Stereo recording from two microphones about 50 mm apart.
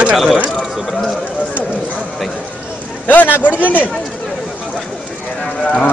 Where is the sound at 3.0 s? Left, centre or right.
Left.